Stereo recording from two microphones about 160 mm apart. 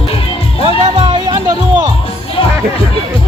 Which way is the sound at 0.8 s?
30° right (ahead or behind).